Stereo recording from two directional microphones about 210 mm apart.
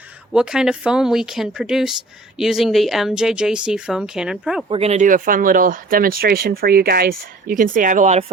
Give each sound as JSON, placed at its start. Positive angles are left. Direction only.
{"t": 0.3, "sound": "speech", "side_deg": -5}
{"t": 4.7, "sound": "speech", "side_deg": -30}